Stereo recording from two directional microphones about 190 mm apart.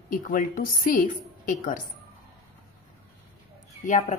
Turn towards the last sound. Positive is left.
turn(degrees=40)  # may be behind; listen again after turning